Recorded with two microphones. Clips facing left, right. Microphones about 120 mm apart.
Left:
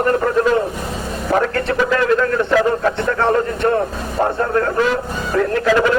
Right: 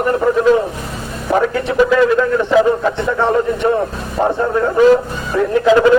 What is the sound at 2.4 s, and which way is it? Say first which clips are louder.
A man's voice: right 3 dB; 15° right (ahead or behind).